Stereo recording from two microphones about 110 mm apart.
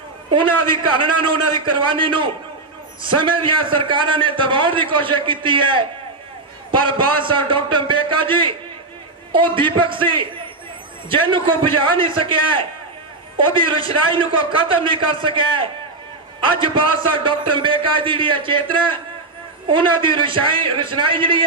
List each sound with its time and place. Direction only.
0.3 s a man's voice: 50° right (ahead or behind)